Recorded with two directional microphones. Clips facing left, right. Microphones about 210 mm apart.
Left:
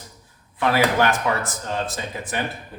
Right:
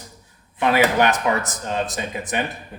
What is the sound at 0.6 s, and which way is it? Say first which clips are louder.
Speech: right 2 dB; 20° right (ahead or behind).